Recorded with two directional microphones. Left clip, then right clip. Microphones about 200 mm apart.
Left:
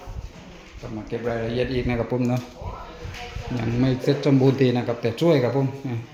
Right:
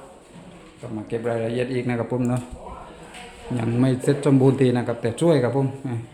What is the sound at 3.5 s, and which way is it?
Speech, 10° right (ahead or behind).